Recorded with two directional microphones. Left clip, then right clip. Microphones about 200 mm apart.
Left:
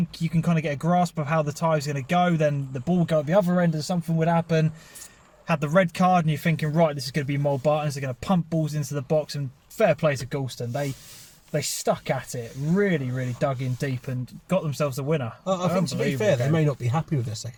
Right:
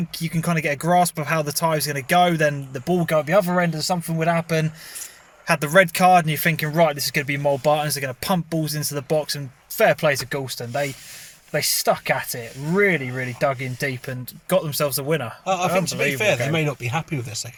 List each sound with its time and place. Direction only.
0.1 s speech: 5° right (ahead or behind)
15.4 s speech: 25° left (ahead or behind)